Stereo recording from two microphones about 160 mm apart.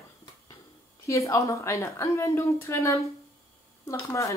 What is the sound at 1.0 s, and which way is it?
A woman's voice, 20° left (ahead or behind).